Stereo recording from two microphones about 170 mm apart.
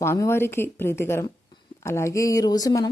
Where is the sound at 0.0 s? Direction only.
15° left (ahead or behind).